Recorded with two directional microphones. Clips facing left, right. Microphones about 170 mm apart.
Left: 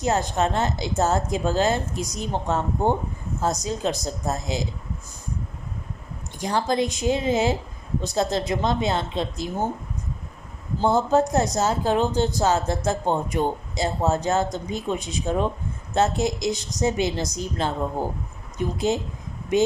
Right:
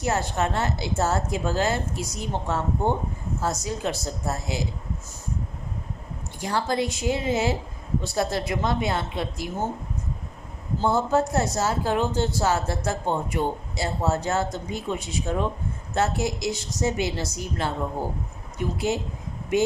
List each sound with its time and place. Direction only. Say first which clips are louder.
0.0 s speech: left 3 dB; 15° left (ahead or behind)
6.4 s speech: left 2 dB; 20° left (ahead or behind)
10.8 s speech: left 3 dB; 20° left (ahead or behind)
18.5 s a woman's voice: left 2 dB; 20° left (ahead or behind)